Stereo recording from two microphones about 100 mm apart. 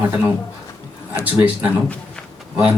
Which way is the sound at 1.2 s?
15° right (ahead or behind).